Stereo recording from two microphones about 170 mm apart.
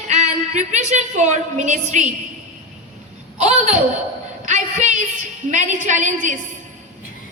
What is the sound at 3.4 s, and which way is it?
Laughter, 40° right (ahead or behind).